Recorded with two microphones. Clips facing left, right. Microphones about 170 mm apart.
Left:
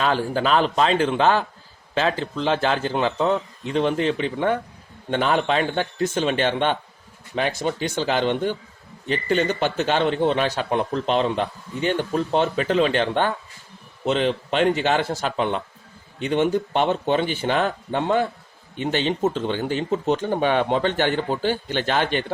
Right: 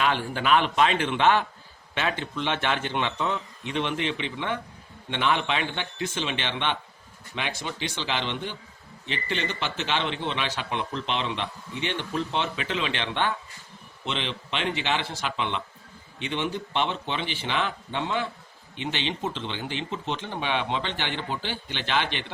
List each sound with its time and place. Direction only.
0.0 s a man's voice: 40° left (ahead or behind)